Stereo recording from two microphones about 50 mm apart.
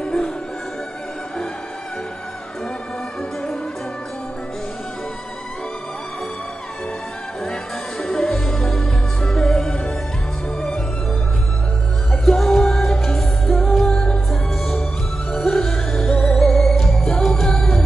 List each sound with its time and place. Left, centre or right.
0.0 s music: centre
8.0 s music: centre
12.1 s music: centre